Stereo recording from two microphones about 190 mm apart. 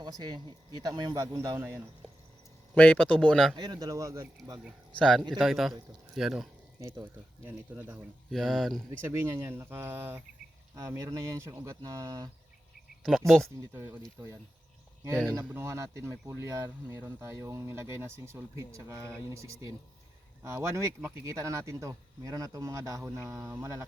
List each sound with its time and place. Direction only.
0.0 s speech: 20° right (ahead or behind)
2.7 s speech: 5° left (ahead or behind)
3.5 s speech: 20° right (ahead or behind)
4.9 s speech: 5° left (ahead or behind)
6.7 s speech: 15° right (ahead or behind)
8.3 s speech: centre (ahead or behind)
8.9 s speech: 15° right (ahead or behind)
13.0 s speech: centre (ahead or behind)
13.7 s speech: 15° right (ahead or behind)
15.0 s speech: 15° right (ahead or behind)